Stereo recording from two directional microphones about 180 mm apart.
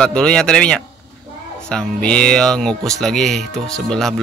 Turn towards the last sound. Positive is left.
turn(degrees=0)  # may be behind; listen again after turning